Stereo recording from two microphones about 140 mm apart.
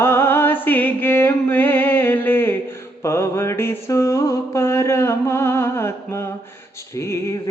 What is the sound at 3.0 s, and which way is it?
Mantra, 20° left (ahead or behind).